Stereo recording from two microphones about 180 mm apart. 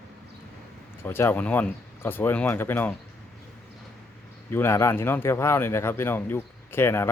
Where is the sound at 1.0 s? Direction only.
10° left (ahead or behind).